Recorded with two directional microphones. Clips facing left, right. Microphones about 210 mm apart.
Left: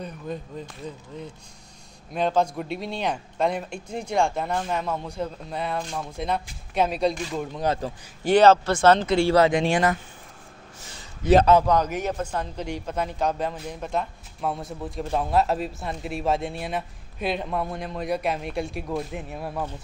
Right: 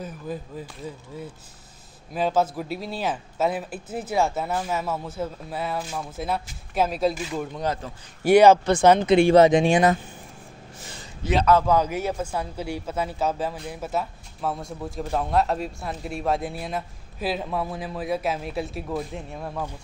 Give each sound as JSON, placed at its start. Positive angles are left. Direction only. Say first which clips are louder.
{"t": 0.0, "sound": "speech", "louder": "even", "side_deg": -5}
{"t": 7.6, "sound": "a man's voice", "louder": "left 5 dB", "side_deg": 30}
{"t": 8.2, "sound": "speech", "louder": "right 2 dB", "side_deg": -10}
{"t": 11.6, "sound": "speech", "louder": "right 1 dB", "side_deg": -10}